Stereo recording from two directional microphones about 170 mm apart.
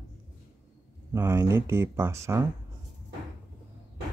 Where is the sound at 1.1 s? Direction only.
15° right (ahead or behind).